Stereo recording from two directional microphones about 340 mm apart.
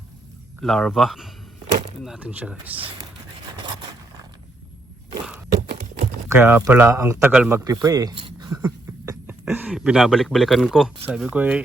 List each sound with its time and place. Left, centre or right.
0.6 s speech: centre
2.7 s speech: centre
5.5 s a sound: centre
6.2 s a man's voice: centre